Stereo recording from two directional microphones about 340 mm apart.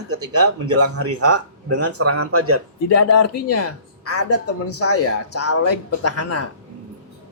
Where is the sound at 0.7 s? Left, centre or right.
Right.